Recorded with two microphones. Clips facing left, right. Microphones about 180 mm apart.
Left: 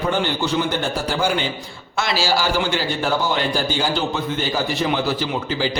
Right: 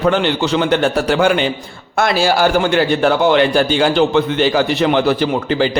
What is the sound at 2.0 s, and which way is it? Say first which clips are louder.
A man's voice: right 7 dB; 55° right (ahead or behind).